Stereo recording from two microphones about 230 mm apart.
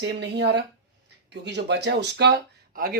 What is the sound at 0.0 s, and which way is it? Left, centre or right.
Speech, right.